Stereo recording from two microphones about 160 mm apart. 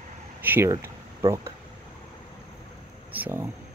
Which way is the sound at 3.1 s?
10° right (ahead or behind).